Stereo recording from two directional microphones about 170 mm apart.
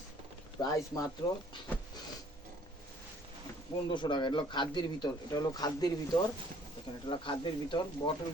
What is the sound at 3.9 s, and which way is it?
A man's voice, 25° left (ahead or behind).